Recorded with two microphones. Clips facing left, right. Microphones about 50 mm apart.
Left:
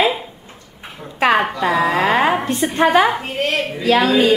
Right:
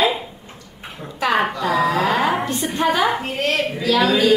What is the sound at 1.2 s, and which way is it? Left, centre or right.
A woman's voice, left.